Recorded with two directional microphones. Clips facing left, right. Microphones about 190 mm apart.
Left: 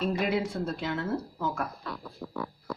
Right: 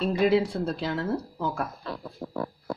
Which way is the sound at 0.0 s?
30° right (ahead or behind).